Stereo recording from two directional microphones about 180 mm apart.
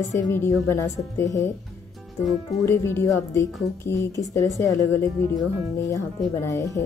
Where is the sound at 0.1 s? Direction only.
15° left (ahead or behind).